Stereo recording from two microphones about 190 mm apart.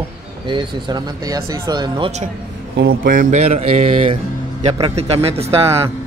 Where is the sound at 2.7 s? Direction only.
50° right (ahead or behind); by 5.8 s 30° right (ahead or behind).